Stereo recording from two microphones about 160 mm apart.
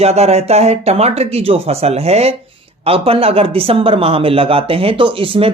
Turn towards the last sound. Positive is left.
turn(degrees=-35)  # may be behind; listen again after turning